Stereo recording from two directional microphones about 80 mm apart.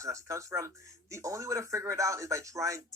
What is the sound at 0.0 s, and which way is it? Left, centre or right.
Speech, right.